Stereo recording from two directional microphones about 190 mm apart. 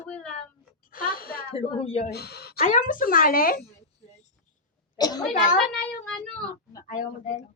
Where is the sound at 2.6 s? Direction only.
40° left (ahead or behind).